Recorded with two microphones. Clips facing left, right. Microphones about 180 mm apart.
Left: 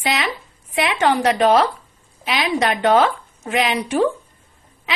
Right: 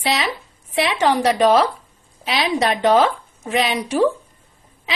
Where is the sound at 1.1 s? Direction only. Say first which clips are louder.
Even; 40° right (ahead or behind).